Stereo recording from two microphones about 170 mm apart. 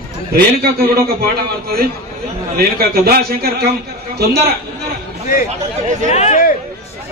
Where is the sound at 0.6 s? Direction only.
65° right (ahead or behind).